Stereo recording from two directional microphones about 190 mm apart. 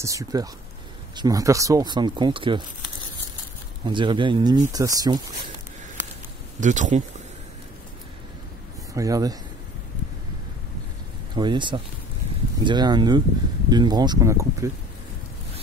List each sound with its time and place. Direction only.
0.0 s speech: 15° right (ahead or behind)
6.6 s speech: 40° right (ahead or behind)
8.9 s speech: 20° right (ahead or behind)
11.3 s speech: 25° right (ahead or behind)